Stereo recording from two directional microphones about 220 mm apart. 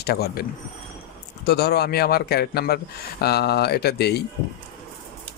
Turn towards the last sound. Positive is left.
turn(degrees=50)  # may be behind; listen again after turning